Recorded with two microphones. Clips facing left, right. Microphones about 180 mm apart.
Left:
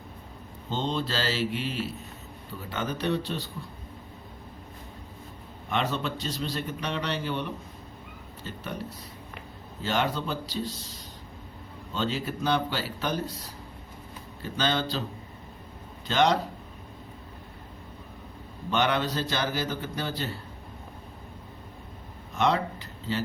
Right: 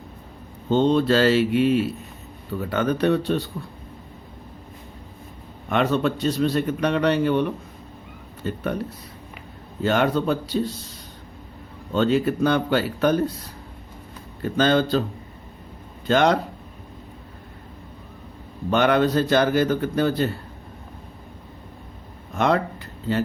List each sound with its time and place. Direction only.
0.7 s a man's voice: 55° right (ahead or behind)
5.6 s a man's voice: 55° right (ahead or behind)
9.8 s a man's voice: 55° right (ahead or behind)
11.9 s a man's voice: 55° right (ahead or behind)
14.4 s a man's voice: 50° right (ahead or behind)
16.0 s a man's voice: 55° right (ahead or behind)
18.7 s a man's voice: 50° right (ahead or behind)
22.4 s a sound: 50° right (ahead or behind)